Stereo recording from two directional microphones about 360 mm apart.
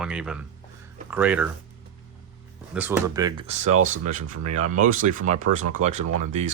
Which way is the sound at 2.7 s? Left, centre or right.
Centre.